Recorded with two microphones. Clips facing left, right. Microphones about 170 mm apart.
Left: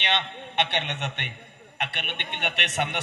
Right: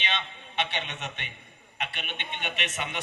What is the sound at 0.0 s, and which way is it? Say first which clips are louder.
A man's voice: left 5 dB; 65° left (ahead or behind).